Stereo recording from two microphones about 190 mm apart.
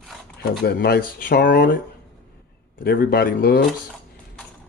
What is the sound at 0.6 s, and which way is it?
Speech, 60° left (ahead or behind).